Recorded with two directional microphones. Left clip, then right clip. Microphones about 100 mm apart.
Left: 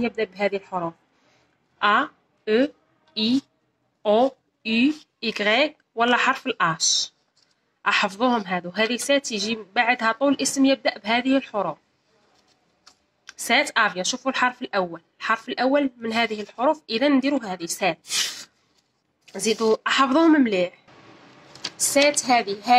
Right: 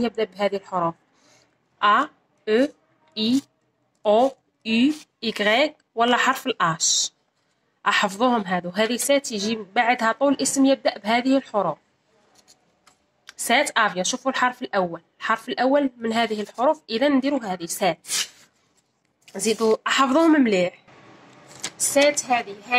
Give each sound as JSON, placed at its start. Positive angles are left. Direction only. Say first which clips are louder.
{"t": 0.1, "sound": "a woman's voice", "louder": "right 1 dB", "side_deg": -5}
{"t": 0.7, "sound": "speech", "louder": "right 4 dB", "side_deg": -40}
{"t": 1.8, "sound": "speech", "louder": "right 1 dB", "side_deg": -5}
{"t": 2.4, "sound": "a sound", "louder": "right 1 dB", "side_deg": -5}
{"t": 4.0, "sound": "a woman's voice", "louder": "right 1 dB", "side_deg": -10}
{"t": 12.8, "sound": "speech", "louder": "left 1 dB", "side_deg": -5}
{"t": 22.1, "sound": "a woman's voice", "louder": "left 3 dB", "side_deg": -10}